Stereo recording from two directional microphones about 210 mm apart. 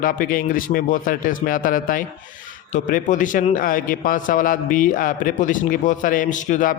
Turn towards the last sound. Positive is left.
turn(degrees=40)  # may be behind; listen again after turning